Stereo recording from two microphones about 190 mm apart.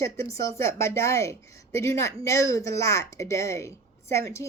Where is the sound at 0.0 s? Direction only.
15° left (ahead or behind).